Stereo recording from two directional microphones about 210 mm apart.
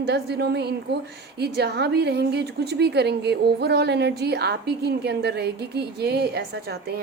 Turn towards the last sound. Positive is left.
turn(degrees=-50)  # may be behind; listen again after turning